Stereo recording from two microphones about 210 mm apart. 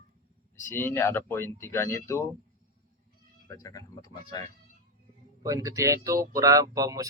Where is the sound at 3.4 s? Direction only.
15° left (ahead or behind).